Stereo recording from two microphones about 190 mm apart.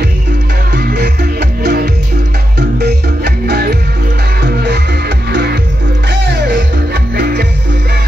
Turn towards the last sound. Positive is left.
turn(degrees=-65)  # may be behind; listen again after turning